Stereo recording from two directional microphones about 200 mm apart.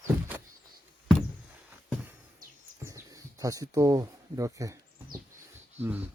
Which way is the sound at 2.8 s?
15° right (ahead or behind).